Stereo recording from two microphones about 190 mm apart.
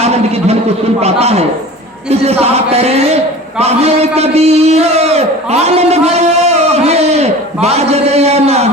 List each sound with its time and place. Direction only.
0.0 s a man's voice: 35° right (ahead or behind)